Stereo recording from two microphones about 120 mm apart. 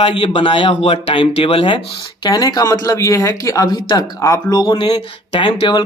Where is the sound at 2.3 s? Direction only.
30° left (ahead or behind).